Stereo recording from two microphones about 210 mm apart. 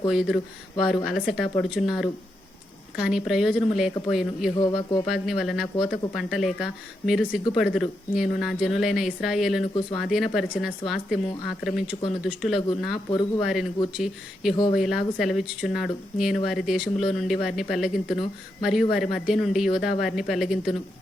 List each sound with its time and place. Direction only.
0.1 s speech: centre (ahead or behind)
4.6 s speech: 20° left (ahead or behind)
5.0 s speech: centre (ahead or behind)